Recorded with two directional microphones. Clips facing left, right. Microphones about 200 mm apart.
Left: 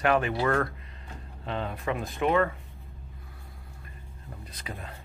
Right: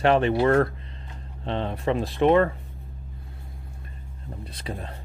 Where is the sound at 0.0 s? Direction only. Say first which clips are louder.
Right 5 dB; 25° right (ahead or behind).